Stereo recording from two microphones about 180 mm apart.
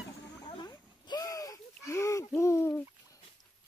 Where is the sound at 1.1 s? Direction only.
20° left (ahead or behind).